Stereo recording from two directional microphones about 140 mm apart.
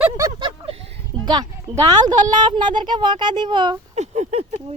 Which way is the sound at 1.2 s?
30° right (ahead or behind).